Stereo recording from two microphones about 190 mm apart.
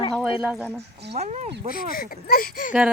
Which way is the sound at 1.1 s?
35° right (ahead or behind).